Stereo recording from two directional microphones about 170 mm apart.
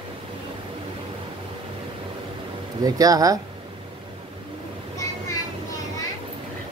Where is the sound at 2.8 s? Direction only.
20° right (ahead or behind).